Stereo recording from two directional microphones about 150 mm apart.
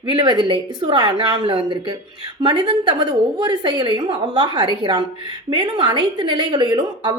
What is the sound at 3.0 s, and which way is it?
A woman's voice, 30° right (ahead or behind).